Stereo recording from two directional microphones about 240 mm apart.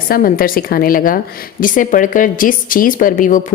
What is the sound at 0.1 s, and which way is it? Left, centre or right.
A woman's voice, left.